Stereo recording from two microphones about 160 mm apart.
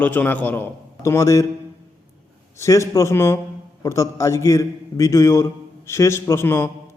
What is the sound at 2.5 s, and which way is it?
A man's voice, 20° left (ahead or behind).